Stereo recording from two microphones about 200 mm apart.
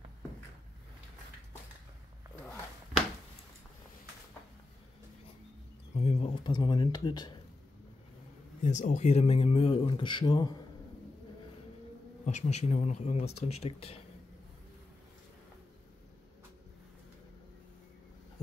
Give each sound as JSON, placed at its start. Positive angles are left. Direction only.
{"t": 5.9, "sound": "a sound", "side_deg": 30}
{"t": 8.6, "sound": "speech", "side_deg": 35}
{"t": 12.3, "sound": "speech", "side_deg": 35}